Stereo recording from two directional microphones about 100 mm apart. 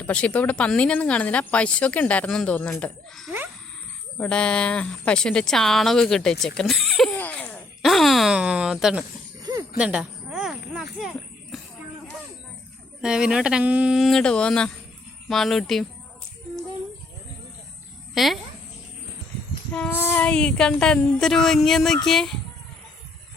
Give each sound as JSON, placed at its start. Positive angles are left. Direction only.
{"t": 0.1, "sound": "a woman's voice", "side_deg": 10}
{"t": 4.2, "sound": "a woman's voice", "side_deg": 10}
{"t": 7.2, "sound": "cough", "side_deg": 15}
{"t": 7.8, "sound": "a woman's voice", "side_deg": 0}
{"t": 9.4, "sound": "a sound", "side_deg": -40}
{"t": 9.7, "sound": "a sound", "side_deg": -10}
{"t": 13.0, "sound": "speech", "side_deg": -5}
{"t": 14.1, "sound": "a woman's voice", "side_deg": 10}
{"t": 18.1, "sound": "speech", "side_deg": 0}
{"t": 19.7, "sound": "a woman's voice", "side_deg": 15}